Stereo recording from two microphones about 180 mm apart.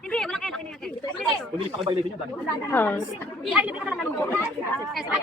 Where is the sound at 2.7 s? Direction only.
10° left (ahead or behind).